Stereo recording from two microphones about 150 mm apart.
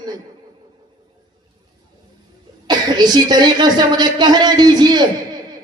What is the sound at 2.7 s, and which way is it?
Speech, 30° right (ahead or behind).